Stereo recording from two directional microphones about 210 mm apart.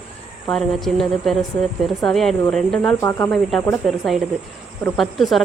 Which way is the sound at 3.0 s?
15° left (ahead or behind).